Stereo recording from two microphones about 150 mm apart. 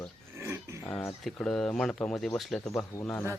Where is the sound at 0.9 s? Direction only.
Centre (ahead or behind).